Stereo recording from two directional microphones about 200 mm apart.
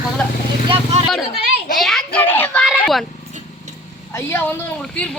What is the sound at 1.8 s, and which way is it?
A child's voice, centre (ahead or behind).